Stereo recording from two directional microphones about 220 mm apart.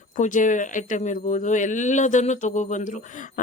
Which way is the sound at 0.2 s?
35° left (ahead or behind).